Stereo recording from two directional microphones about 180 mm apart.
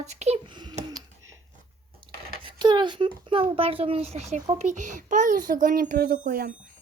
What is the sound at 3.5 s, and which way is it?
Speech, 30° right (ahead or behind).